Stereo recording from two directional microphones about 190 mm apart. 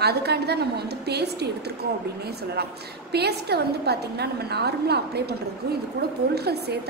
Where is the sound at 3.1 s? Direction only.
60° right (ahead or behind).